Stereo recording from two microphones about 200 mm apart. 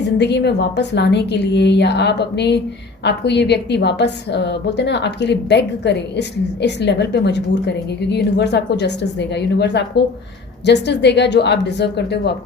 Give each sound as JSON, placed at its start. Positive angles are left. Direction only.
{"t": 0.2, "sound": "a woman's voice", "side_deg": 55}